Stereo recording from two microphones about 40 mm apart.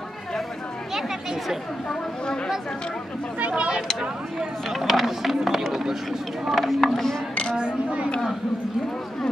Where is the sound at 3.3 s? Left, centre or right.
Right.